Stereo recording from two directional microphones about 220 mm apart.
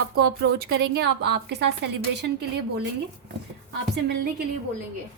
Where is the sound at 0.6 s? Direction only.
45° right (ahead or behind).